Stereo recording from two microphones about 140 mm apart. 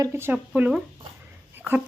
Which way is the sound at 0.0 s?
15° right (ahead or behind).